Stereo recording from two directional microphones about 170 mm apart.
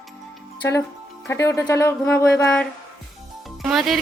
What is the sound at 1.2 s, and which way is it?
Speech, 15° left (ahead or behind).